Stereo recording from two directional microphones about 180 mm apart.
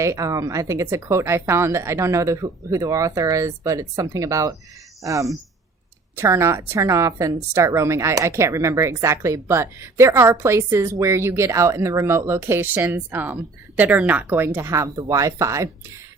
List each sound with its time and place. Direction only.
0.0 s a woman's voice: 15° right (ahead or behind)